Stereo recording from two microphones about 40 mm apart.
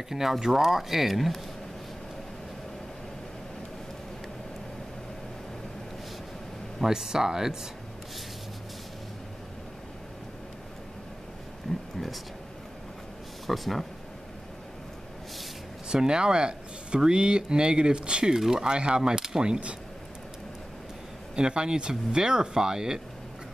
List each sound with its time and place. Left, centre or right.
0.1 s speech: centre
6.9 s speech: centre
11.7 s a sound: centre
13.5 s speech: centre
15.9 s speech: right
21.4 s speech: right